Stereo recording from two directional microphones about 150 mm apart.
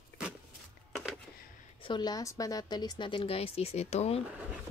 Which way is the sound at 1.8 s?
30° left (ahead or behind).